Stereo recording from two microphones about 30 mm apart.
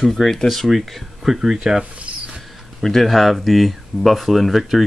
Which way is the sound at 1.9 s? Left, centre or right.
Right.